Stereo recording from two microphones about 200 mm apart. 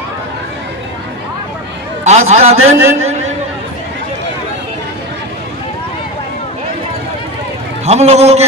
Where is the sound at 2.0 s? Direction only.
35° right (ahead or behind).